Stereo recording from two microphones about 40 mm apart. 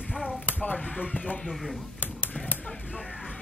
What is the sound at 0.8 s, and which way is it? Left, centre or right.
Music, left.